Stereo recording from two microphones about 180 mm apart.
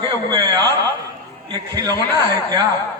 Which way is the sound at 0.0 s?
25° right (ahead or behind).